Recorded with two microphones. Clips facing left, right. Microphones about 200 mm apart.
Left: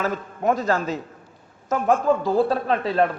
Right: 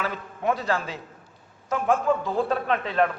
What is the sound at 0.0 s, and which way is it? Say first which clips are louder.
A woman's voice: left 4 dB; 45° left (ahead or behind).